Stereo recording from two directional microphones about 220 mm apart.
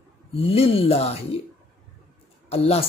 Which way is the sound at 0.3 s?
25° left (ahead or behind).